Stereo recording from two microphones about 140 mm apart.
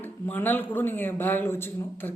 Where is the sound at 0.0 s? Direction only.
15° left (ahead or behind).